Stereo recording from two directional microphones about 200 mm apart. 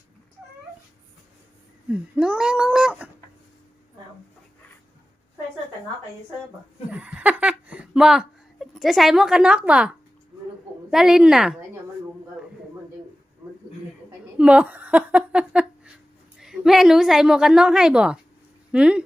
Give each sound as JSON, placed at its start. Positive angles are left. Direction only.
{"t": 1.9, "sound": "speech", "side_deg": -5}
{"t": 6.9, "sound": "speech", "side_deg": -5}
{"t": 10.9, "sound": "a woman's voice", "side_deg": 0}
{"t": 14.3, "sound": "a sound", "side_deg": -5}
{"t": 16.4, "sound": "a woman's voice", "side_deg": 0}